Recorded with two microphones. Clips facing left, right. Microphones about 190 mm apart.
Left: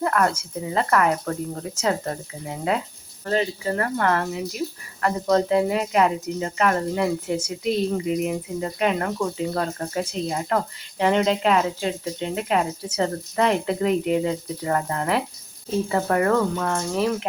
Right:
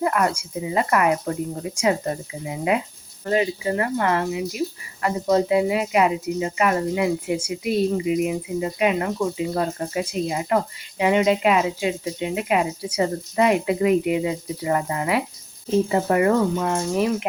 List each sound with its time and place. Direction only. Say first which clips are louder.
0.0 s speech: even; 10° right (ahead or behind)